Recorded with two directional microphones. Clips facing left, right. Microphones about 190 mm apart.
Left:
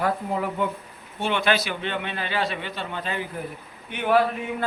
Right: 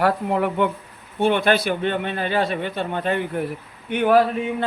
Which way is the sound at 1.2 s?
50° right (ahead or behind).